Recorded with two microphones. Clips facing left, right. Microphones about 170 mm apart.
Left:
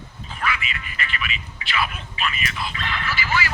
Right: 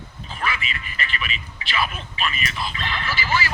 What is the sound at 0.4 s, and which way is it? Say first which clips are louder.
A woman's voice: left 1 dB; 35° right (ahead or behind).